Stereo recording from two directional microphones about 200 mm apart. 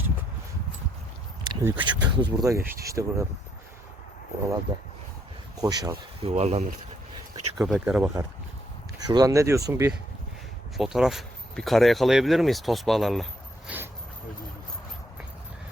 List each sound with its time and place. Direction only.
1.5 s a sound: 10° right (ahead or behind)
1.8 s speech: 25° right (ahead or behind)
5.5 s speech: 20° right (ahead or behind)
6.2 s speech: 30° right (ahead or behind)
7.6 s speech: 5° right (ahead or behind)
9.0 s speech: 20° right (ahead or behind)
10.8 s speech: centre (ahead or behind)